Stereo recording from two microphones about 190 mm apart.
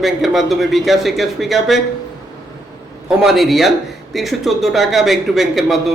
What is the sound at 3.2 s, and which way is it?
Speech, centre (ahead or behind).